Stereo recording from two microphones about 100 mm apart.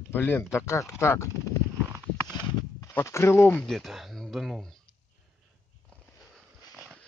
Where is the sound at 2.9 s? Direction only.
25° left (ahead or behind).